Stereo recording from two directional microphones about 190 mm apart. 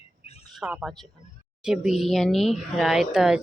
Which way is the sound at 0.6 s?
5° right (ahead or behind).